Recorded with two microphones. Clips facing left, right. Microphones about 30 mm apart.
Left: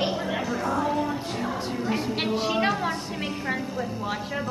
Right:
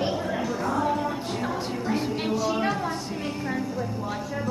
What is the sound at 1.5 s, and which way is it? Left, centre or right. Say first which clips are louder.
Music: left 1 dB; centre.